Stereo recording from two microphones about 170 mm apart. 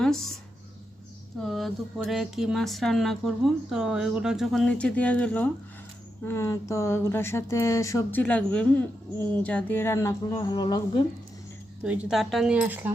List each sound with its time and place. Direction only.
0.0 s speech: 5° left (ahead or behind)
1.4 s speech: centre (ahead or behind); by 8.2 s 15° left (ahead or behind)
8.2 s speech: 5° left (ahead or behind); by 11.0 s 25° left (ahead or behind)
11.8 s speech: 5° right (ahead or behind)